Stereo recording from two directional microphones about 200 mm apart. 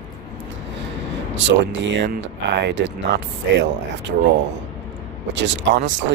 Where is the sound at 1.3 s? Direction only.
65° right (ahead or behind).